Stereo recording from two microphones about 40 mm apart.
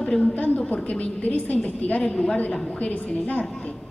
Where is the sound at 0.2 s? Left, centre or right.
Left.